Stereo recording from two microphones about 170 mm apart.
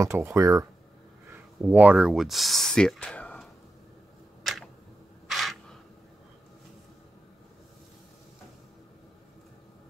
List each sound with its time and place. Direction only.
0.0 s speech: 15° right (ahead or behind); by 3.4 s 5° left (ahead or behind)
4.4 s tick: centre (ahead or behind)
5.3 s single-lens reflex camera: centre (ahead or behind)